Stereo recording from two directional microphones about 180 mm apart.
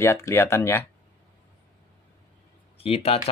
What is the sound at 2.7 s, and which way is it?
Speech, 35° left (ahead or behind).